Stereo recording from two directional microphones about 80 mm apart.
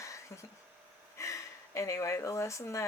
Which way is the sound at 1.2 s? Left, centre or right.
Left.